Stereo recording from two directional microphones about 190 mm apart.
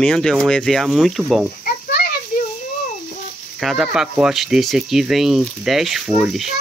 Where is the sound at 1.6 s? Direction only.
50° left (ahead or behind).